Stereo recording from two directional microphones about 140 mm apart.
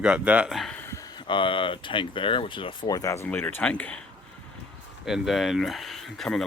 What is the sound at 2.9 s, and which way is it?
Speech, 25° left (ahead or behind).